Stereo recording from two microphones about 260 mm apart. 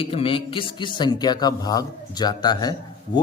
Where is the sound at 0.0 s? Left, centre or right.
Left.